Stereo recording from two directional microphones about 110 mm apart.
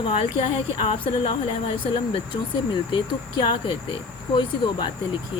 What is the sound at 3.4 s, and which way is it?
Speech, 45° left (ahead or behind).